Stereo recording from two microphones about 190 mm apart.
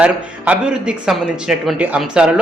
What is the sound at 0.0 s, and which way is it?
A man's voice, 5° right (ahead or behind).